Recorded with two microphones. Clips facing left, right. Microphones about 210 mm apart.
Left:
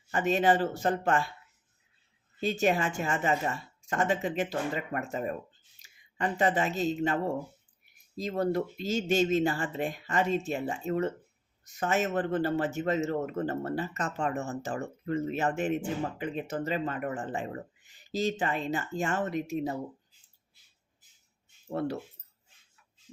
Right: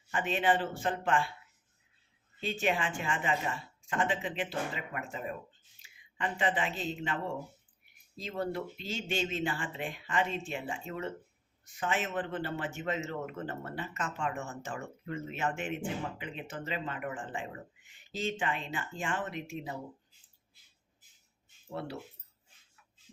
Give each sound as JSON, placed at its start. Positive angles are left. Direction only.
{"t": 0.1, "sound": "a man's voice", "side_deg": 40}
{"t": 2.4, "sound": "a man's voice", "side_deg": 40}
{"t": 21.7, "sound": "speech", "side_deg": 45}